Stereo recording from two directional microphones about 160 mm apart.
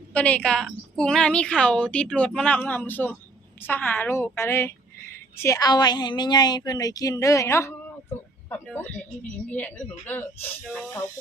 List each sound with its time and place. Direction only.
0.1 s a woman's voice: 10° left (ahead or behind)